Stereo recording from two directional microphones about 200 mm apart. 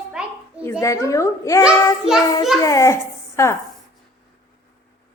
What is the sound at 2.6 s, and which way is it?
Speech, 15° left (ahead or behind).